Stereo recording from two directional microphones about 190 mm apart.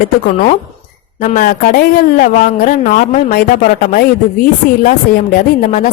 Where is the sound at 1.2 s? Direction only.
45° left (ahead or behind).